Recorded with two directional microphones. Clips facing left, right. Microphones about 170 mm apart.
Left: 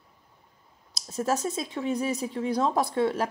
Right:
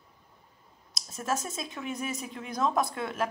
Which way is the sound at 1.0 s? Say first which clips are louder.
Left 5 dB; 35° left (ahead or behind).